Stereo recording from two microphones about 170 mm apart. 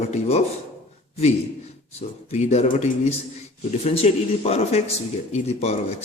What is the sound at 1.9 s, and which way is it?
A man's voice, 40° left (ahead or behind).